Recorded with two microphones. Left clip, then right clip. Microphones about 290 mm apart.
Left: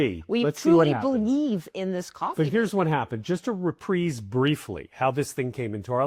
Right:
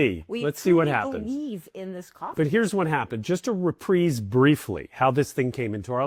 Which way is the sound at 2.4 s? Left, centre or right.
Right.